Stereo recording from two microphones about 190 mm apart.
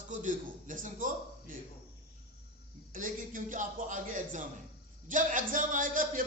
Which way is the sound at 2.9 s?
45° right (ahead or behind).